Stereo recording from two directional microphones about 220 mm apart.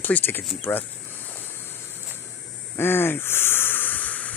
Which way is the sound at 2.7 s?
10° left (ahead or behind).